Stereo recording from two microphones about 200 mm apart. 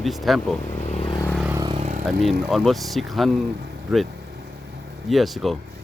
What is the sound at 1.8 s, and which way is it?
Vehicle, 40° right (ahead or behind).